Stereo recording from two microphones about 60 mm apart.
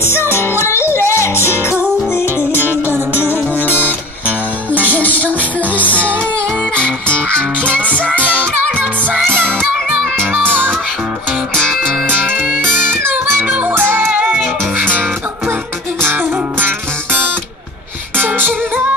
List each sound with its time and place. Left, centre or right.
0.0 s music: left
3.6 s music: left
5.0 s music: left
5.9 s music: right
7.3 s music: right
12.1 s music: right